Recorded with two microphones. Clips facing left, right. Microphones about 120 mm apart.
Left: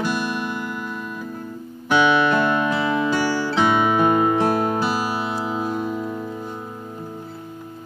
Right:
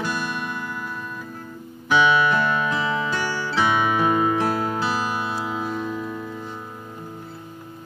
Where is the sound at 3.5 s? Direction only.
20° left (ahead or behind).